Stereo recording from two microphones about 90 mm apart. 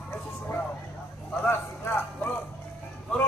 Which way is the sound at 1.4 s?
25° left (ahead or behind).